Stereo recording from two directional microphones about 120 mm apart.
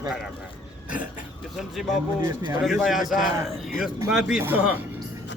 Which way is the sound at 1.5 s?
Centre (ahead or behind).